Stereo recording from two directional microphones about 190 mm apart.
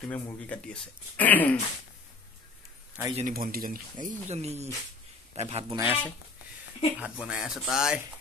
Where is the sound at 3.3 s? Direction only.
50° right (ahead or behind); by 5.6 s 35° right (ahead or behind).